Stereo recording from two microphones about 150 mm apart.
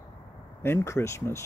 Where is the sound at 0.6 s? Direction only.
15° left (ahead or behind).